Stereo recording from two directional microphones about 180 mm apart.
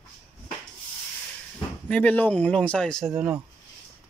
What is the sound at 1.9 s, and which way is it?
Speech, 10° left (ahead or behind).